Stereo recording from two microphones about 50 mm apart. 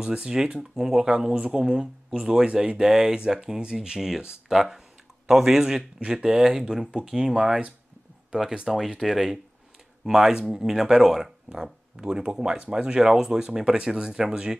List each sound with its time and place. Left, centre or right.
0.0 s speech: centre